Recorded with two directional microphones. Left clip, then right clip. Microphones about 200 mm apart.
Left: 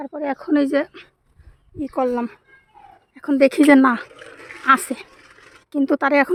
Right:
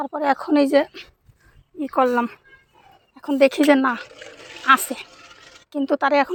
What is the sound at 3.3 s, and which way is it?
Speech, 90° left.